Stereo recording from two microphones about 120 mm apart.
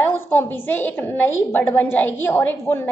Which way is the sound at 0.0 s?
20° left (ahead or behind).